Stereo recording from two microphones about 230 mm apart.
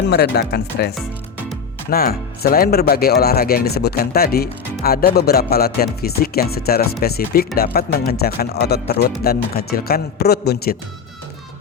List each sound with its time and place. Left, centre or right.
0.1 s speech: left